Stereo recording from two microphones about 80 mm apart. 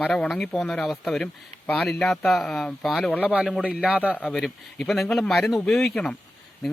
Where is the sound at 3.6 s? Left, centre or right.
Centre.